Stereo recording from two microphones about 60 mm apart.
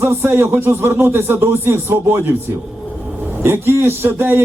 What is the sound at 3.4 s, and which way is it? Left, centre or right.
A man's voice, right.